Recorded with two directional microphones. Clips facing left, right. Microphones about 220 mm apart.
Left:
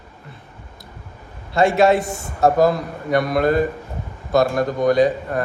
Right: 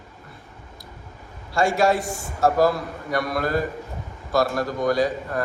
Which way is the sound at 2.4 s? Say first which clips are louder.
Left 3 dB; 20° left (ahead or behind).